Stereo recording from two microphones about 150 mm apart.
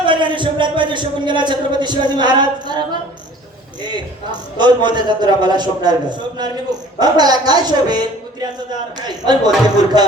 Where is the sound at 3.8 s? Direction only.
30° right (ahead or behind).